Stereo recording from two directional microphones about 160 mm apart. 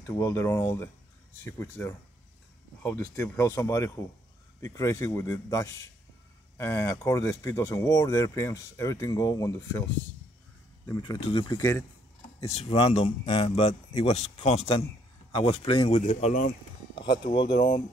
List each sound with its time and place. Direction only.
0.0 s speech: 20° left (ahead or behind)
11.0 s speech: 35° left (ahead or behind)
11.5 s speech: 20° left (ahead or behind)
12.4 s speech: 40° left (ahead or behind)
15.9 s speech: 45° left (ahead or behind)
16.9 s speech: 30° left (ahead or behind)
17.6 s speech: 50° left (ahead or behind)